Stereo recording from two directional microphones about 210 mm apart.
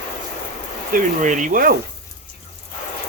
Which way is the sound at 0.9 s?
35° right (ahead or behind).